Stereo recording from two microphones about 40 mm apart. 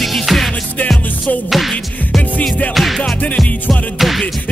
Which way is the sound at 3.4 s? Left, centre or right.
Left.